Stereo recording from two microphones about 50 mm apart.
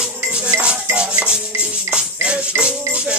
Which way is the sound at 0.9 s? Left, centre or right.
Right.